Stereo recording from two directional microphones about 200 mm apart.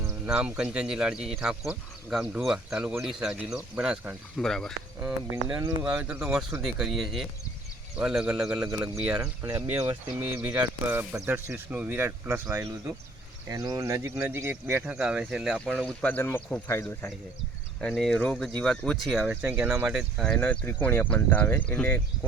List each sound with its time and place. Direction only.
0.0 s speech: 5° right (ahead or behind)